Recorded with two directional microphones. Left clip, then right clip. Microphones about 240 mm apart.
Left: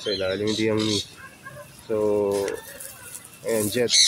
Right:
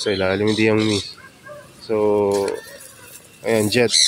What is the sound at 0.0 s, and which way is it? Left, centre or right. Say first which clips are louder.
Speech: right 6 dB; right.